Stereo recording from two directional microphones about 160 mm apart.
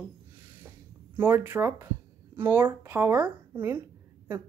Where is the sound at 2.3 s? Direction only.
15° right (ahead or behind).